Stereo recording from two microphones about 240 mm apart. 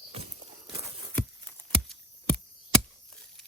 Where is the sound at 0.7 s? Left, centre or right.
Centre.